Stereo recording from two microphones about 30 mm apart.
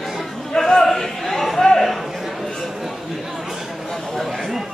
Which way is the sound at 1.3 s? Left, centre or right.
Centre.